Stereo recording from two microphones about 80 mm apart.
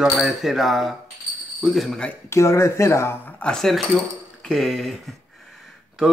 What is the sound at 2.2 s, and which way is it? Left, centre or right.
Speech, left.